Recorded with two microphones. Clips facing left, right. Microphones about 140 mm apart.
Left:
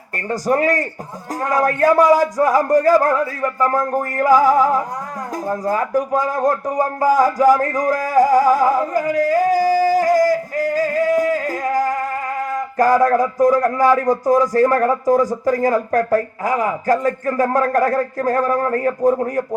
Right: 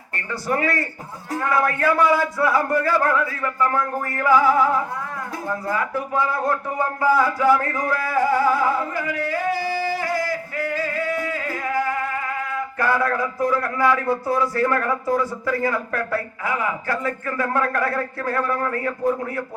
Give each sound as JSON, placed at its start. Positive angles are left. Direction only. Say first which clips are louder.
{"t": 0.3, "sound": "speech", "louder": "left 6 dB", "side_deg": 40}